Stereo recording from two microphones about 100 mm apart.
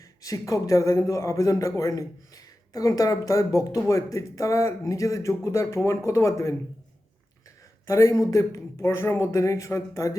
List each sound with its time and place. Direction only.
0.0 s a man's voice: 35° left (ahead or behind)
7.9 s a man's voice: 30° left (ahead or behind)